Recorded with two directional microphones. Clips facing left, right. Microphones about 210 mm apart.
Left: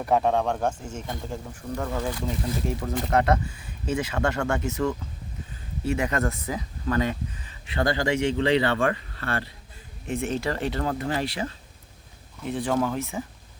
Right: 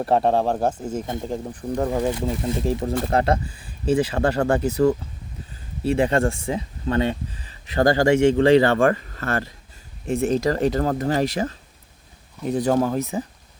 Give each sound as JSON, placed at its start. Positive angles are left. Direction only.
{"t": 0.0, "sound": "speech", "side_deg": -35}
{"t": 2.0, "sound": "speech", "side_deg": -25}